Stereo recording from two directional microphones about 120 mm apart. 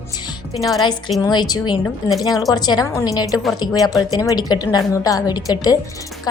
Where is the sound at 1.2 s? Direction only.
35° left (ahead or behind).